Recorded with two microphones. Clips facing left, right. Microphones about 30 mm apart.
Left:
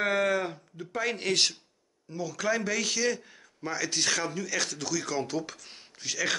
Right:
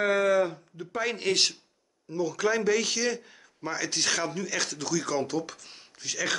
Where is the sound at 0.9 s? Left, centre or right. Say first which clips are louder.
Right 1 dB; centre.